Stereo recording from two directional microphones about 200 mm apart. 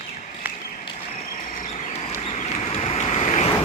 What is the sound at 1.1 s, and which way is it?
Vehicle, 40° left (ahead or behind).